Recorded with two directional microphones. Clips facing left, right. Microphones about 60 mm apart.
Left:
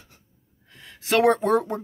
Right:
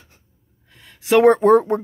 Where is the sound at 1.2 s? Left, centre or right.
Right.